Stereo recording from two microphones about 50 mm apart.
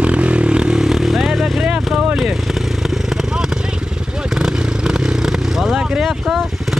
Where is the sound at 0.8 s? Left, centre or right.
Centre.